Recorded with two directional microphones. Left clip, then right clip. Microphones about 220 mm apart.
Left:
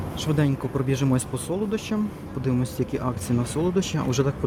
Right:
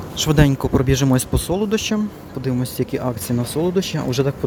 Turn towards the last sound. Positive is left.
turn(degrees=-10)  # may be behind; listen again after turning